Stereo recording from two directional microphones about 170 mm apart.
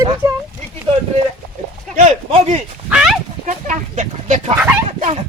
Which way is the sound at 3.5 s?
45° right (ahead or behind).